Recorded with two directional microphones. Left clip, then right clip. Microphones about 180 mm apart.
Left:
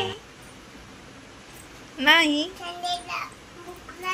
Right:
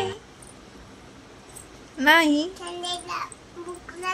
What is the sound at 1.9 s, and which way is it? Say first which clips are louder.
A child's voice: right 1 dB; 25° right (ahead or behind).